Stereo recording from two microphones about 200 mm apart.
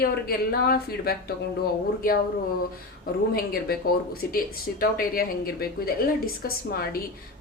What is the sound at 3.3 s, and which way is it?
A woman's voice, 50° left (ahead or behind).